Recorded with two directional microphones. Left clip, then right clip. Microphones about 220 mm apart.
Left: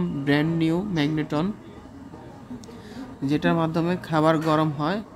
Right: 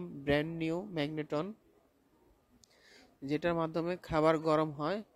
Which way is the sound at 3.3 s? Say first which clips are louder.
Left 9 dB; 35° right (ahead or behind).